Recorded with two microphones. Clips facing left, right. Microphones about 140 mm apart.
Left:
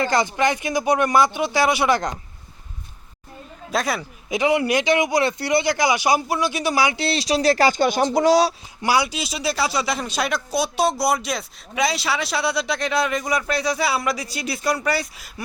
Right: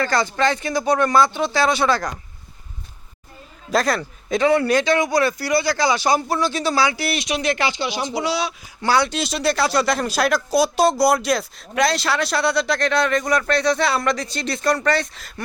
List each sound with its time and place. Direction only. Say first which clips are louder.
0.0 s speech: even; 15° left (ahead or behind)
3.7 s speech: right 4 dB; centre (ahead or behind); by 8.5 s 40° left (ahead or behind)
8.8 s speech: right 2 dB; 10° left (ahead or behind)